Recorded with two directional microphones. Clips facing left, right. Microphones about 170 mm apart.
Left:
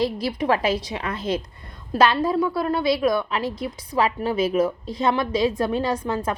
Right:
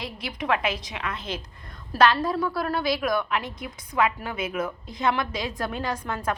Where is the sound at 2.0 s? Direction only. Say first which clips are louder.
Left 2 dB; 25° left (ahead or behind).